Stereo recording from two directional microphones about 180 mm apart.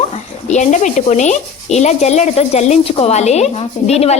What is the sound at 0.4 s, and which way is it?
Speech, 40° left (ahead or behind).